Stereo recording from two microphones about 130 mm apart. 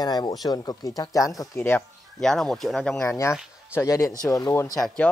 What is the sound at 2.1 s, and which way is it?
Speech, 5° left (ahead or behind).